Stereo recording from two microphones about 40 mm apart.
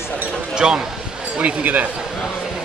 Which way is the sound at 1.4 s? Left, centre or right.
Right.